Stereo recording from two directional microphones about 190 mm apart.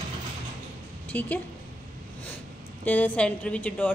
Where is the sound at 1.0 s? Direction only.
10° left (ahead or behind).